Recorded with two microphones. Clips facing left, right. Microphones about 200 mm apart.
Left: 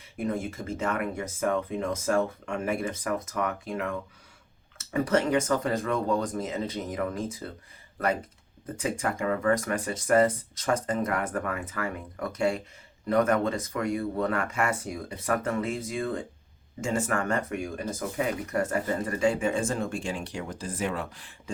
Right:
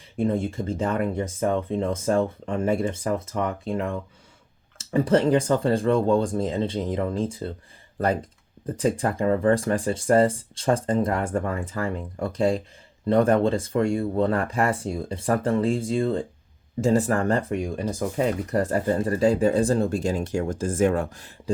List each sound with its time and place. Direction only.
0.2 s speech: 30° right (ahead or behind)
4.9 s speech: 30° right (ahead or behind)